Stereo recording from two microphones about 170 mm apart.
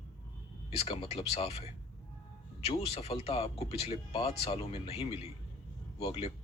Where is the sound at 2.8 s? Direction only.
35° left (ahead or behind).